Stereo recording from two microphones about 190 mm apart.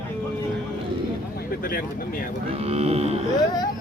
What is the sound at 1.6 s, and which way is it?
Speech, 50° left (ahead or behind).